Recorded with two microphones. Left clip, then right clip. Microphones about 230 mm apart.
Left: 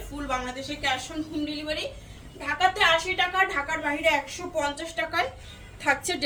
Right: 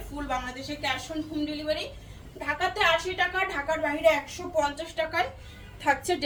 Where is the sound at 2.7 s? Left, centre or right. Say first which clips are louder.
Left 2 dB; centre.